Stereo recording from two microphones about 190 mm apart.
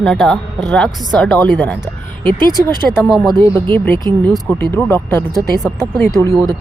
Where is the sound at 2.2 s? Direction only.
20° right (ahead or behind).